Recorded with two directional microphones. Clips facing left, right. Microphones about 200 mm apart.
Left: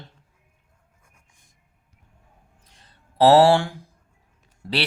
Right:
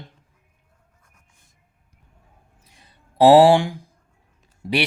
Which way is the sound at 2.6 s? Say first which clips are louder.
Right 2 dB; 10° right (ahead or behind).